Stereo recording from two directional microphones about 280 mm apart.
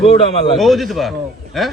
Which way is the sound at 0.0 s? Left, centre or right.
Centre.